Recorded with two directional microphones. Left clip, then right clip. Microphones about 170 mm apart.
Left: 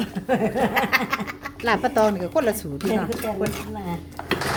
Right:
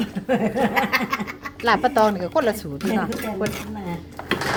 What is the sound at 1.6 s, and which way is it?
Speech, 15° left (ahead or behind).